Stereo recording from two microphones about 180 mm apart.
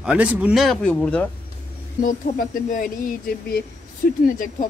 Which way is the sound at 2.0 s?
50° left (ahead or behind).